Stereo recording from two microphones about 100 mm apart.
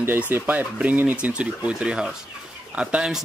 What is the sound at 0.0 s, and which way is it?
Speech, 20° right (ahead or behind).